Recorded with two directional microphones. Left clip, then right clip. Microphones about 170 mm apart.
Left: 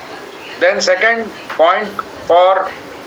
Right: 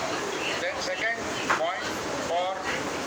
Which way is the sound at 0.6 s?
60° left (ahead or behind).